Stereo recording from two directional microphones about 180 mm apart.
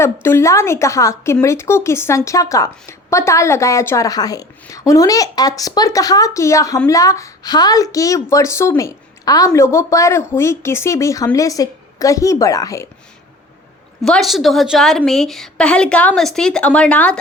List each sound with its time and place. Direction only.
0.0 s speech: 15° left (ahead or behind)
14.0 s a woman's voice: centre (ahead or behind)